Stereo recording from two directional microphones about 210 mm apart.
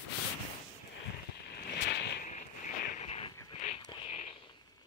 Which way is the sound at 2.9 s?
30° left (ahead or behind).